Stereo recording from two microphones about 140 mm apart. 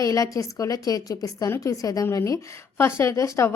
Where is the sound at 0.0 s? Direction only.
25° left (ahead or behind).